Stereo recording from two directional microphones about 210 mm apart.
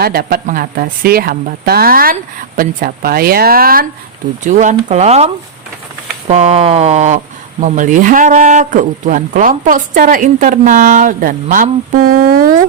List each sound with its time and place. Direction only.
0.0 s speech: 45° right (ahead or behind)